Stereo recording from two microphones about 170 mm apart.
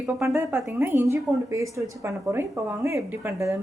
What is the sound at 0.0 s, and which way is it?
A woman's voice, 10° right (ahead or behind).